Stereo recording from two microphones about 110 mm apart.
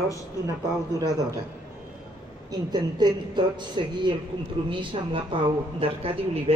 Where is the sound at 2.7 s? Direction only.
40° right (ahead or behind).